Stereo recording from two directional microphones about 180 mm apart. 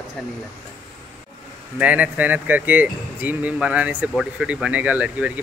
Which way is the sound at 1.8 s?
10° right (ahead or behind).